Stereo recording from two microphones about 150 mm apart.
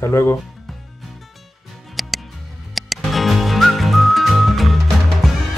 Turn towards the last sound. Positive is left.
turn(degrees=0)  # may be behind; listen again after turning